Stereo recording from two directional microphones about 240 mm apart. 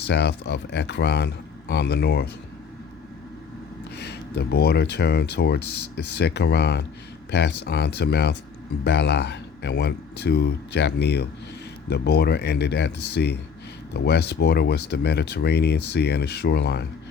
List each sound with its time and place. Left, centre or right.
0.1 s speech: left
3.9 s speech: left